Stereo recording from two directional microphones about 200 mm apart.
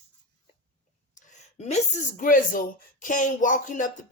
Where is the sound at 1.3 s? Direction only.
35° left (ahead or behind).